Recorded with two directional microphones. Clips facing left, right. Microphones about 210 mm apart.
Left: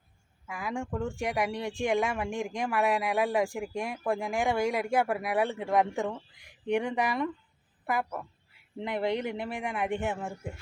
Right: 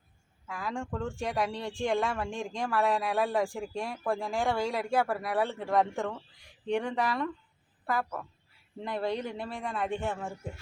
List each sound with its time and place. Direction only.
0.4 s speech: 15° left (ahead or behind)